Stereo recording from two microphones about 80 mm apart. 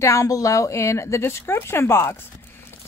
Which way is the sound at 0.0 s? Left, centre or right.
Left.